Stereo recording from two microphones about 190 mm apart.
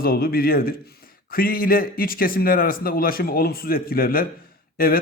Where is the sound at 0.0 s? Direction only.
50° left (ahead or behind).